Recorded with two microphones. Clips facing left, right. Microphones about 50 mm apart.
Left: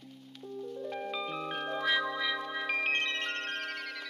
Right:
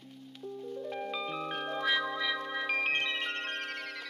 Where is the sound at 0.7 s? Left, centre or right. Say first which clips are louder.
Even; centre.